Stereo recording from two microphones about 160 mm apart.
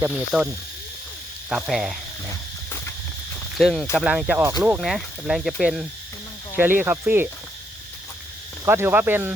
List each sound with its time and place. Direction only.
0.3 s speech: 5° right (ahead or behind)
3.6 s speech: centre (ahead or behind)
6.6 s speech: 15° right (ahead or behind)
8.6 s speech: 15° right (ahead or behind)